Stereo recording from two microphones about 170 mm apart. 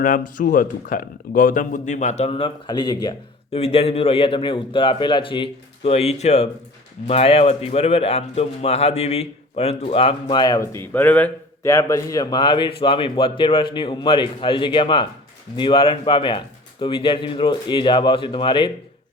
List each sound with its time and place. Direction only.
0.0 s speech: 50° left (ahead or behind); by 3.2 s 25° left (ahead or behind)
3.5 s a man's voice: 35° left (ahead or behind)